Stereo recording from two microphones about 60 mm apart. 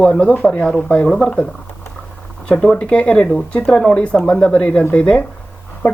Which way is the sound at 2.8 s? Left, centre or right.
Left.